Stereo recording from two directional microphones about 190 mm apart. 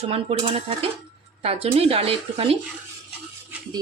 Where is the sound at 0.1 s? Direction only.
30° right (ahead or behind).